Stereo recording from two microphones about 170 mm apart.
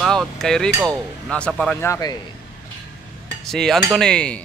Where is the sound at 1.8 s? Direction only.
20° left (ahead or behind).